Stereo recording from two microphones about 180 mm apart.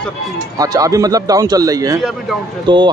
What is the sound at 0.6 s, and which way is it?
Speech, 20° right (ahead or behind).